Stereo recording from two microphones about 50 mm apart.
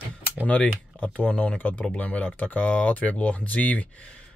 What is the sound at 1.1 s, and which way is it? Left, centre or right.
Speech, left.